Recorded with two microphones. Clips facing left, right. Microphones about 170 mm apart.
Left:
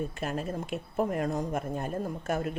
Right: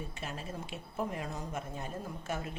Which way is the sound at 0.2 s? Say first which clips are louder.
Left 8 dB; 55° left (ahead or behind).